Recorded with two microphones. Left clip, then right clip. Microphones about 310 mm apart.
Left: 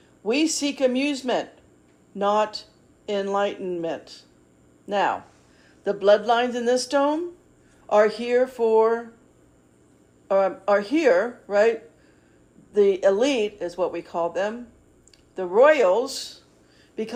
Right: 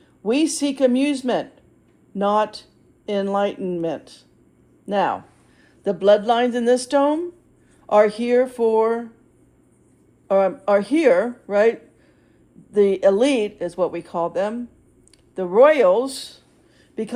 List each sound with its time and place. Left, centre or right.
0.3 s speech: right
10.2 s speech: right